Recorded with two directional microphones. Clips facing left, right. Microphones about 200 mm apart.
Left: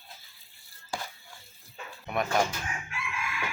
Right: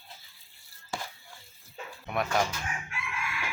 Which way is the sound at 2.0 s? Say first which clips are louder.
Left 1 dB; centre (ahead or behind).